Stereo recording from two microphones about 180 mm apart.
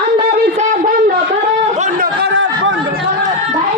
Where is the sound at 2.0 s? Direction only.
70° right (ahead or behind).